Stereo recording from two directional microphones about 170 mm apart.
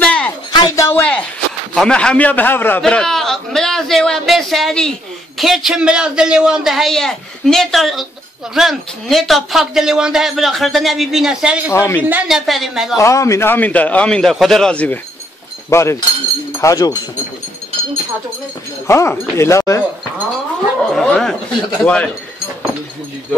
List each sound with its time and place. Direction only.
0.0 s a sound: 5° left (ahead or behind)
0.5 s a sound: 20° left (ahead or behind)
1.8 s a man's voice: 5° left (ahead or behind)
11.7 s a man's voice: 15° left (ahead or behind)
12.0 s a woman's voice: 10° right (ahead or behind)
12.9 s a man's voice: 20° left (ahead or behind)
18.9 s a man's voice: 15° left (ahead or behind)
20.9 s a man's voice: centre (ahead or behind)